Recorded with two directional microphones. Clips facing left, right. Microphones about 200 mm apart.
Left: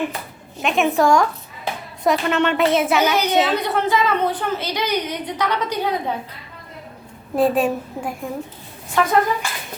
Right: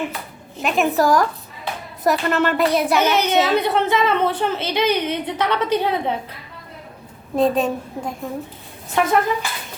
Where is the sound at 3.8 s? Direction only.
25° right (ahead or behind).